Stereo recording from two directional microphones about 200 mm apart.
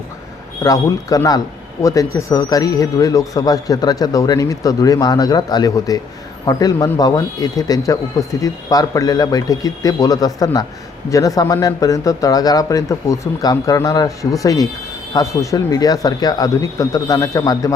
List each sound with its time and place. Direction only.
0.6 s a man's voice: 15° left (ahead or behind)